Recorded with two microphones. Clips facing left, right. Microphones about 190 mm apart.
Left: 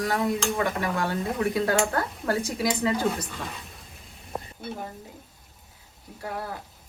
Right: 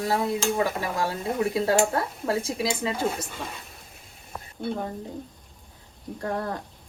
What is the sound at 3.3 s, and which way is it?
Stir, centre (ahead or behind).